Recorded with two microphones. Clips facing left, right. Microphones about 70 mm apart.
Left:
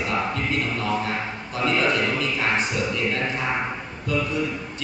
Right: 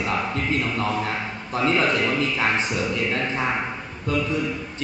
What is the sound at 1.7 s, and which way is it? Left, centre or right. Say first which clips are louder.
A man's voice: even; right.